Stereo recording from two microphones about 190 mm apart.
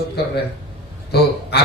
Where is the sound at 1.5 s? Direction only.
60° left (ahead or behind).